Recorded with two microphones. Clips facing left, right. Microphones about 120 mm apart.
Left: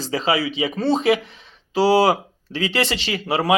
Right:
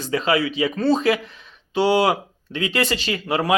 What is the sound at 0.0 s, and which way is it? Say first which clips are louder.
Speech: right 1 dB; 30° left (ahead or behind).